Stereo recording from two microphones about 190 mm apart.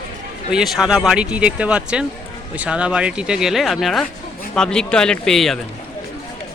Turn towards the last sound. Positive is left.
turn(degrees=0)  # may be behind; listen again after turning